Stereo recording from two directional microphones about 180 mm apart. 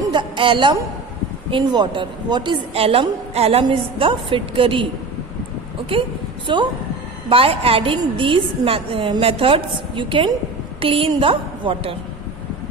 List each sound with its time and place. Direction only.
0.1 s a woman's voice: 25° right (ahead or behind)
5.9 s a woman's voice: 30° right (ahead or behind)